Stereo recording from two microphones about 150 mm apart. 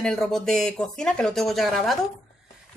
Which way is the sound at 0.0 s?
5° left (ahead or behind).